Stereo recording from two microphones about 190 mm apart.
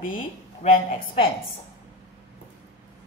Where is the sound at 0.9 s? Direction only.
30° left (ahead or behind).